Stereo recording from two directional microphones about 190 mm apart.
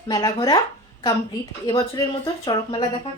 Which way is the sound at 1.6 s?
20° left (ahead or behind).